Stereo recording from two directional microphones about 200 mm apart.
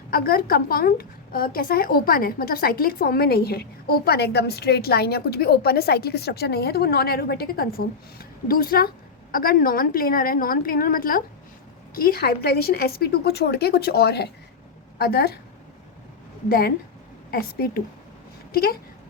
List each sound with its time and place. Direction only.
0.1 s a woman's voice: 50° left (ahead or behind)
16.5 s a woman's voice: 50° left (ahead or behind)